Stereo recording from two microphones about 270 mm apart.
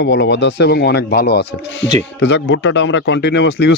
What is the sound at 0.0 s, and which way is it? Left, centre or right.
A man's voice, left.